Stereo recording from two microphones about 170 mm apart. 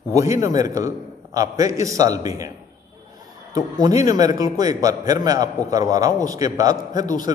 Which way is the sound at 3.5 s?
20° right (ahead or behind).